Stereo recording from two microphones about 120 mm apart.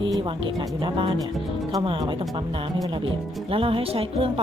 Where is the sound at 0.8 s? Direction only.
40° right (ahead or behind).